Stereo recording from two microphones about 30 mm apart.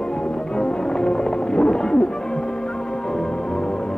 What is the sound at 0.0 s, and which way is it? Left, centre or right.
Music, left.